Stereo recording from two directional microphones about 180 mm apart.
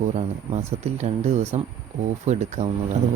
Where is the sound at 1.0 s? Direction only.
35° right (ahead or behind).